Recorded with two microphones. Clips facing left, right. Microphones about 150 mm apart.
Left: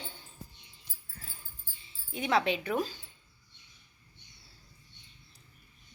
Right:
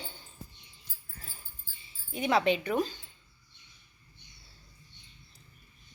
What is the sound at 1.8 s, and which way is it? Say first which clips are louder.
Speech: right 3 dB; centre (ahead or behind).